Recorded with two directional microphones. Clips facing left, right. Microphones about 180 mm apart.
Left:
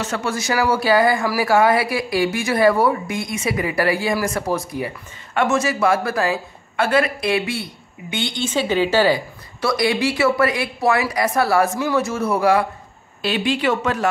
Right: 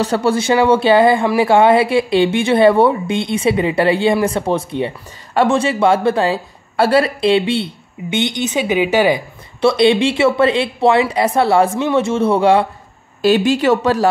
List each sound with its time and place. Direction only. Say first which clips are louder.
0.0 s speech: right 8 dB; 35° right (ahead or behind)
13.2 s speech: right 7 dB; 45° right (ahead or behind)